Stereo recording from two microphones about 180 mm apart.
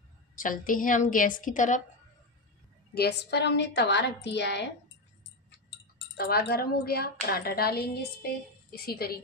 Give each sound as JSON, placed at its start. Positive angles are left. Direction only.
{"t": 0.4, "sound": "a woman's voice", "side_deg": 50}
{"t": 2.9, "sound": "a woman's voice", "side_deg": 65}
{"t": 5.9, "sound": "speech", "side_deg": 60}